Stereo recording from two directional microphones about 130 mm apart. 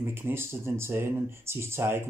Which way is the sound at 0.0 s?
20° right (ahead or behind).